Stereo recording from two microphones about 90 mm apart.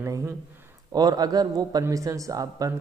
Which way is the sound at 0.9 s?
50° right (ahead or behind).